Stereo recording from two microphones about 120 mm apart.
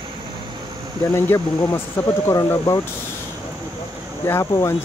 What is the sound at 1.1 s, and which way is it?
Speech, 20° left (ahead or behind).